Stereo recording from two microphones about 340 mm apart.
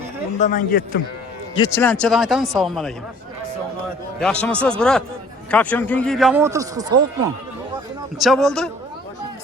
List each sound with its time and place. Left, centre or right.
0.3 s a man's voice: left
1.5 s a man's voice: centre
4.2 s a man's voice: centre
8.2 s a man's voice: centre